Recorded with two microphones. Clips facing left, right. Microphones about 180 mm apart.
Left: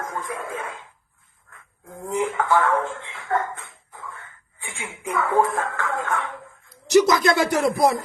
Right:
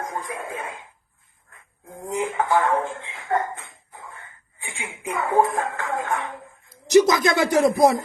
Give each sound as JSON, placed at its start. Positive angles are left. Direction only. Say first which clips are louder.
{"t": 0.0, "sound": "speech", "louder": "even", "side_deg": -20}
{"t": 1.9, "sound": "speech", "louder": "left 2 dB", "side_deg": -20}